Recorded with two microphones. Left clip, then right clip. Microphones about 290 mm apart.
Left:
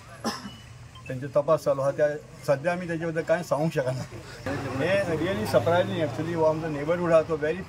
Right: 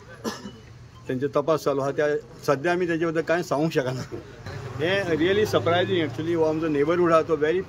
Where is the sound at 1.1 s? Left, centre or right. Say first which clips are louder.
Right 1 dB; centre.